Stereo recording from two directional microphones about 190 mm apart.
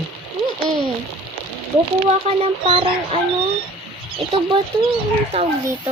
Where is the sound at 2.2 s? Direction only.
30° right (ahead or behind).